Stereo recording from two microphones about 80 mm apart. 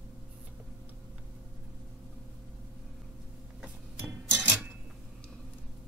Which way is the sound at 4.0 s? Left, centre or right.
Right.